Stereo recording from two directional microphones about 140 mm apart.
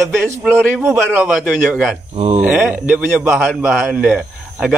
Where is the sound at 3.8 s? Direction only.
10° right (ahead or behind).